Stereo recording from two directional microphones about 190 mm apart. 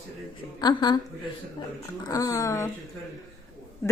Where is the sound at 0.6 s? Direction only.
20° left (ahead or behind).